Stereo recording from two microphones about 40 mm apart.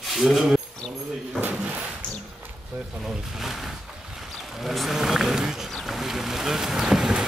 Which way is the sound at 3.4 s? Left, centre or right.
Centre.